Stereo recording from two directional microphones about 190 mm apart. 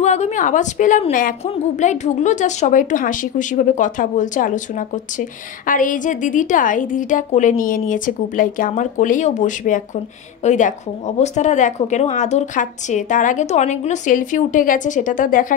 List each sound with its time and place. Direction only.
0.0 s a woman's voice: 40° left (ahead or behind)